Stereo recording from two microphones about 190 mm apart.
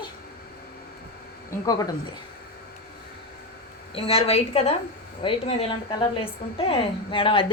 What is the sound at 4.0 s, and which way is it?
A woman's voice, 30° left (ahead or behind).